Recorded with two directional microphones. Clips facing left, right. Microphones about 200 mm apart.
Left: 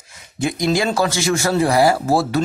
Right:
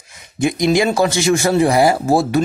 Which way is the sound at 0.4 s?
15° right (ahead or behind).